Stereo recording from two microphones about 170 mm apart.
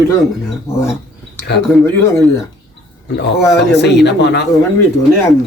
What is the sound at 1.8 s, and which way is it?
Speech, 15° left (ahead or behind).